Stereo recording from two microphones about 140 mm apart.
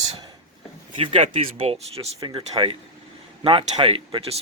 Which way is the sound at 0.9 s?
40° right (ahead or behind).